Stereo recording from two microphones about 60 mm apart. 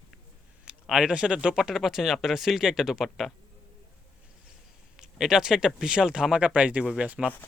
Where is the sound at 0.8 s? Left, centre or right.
Centre.